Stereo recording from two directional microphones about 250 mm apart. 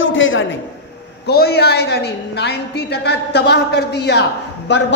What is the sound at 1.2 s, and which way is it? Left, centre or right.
A woman's voice, left.